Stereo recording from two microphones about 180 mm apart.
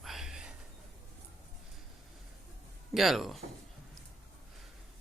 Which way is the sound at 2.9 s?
Centre (ahead or behind).